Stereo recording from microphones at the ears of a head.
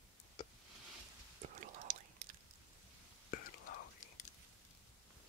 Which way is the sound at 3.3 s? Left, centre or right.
Left.